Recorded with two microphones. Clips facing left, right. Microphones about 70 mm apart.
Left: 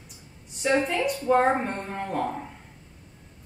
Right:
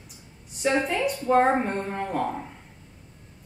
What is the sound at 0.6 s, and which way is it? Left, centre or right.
A woman's voice, centre.